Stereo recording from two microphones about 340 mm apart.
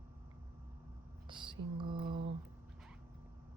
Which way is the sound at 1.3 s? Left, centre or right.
Centre.